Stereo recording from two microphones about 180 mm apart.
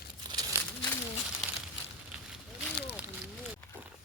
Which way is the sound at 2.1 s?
5° right (ahead or behind).